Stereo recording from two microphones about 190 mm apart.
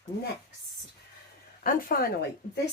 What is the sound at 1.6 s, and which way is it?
Speech, 50° left (ahead or behind).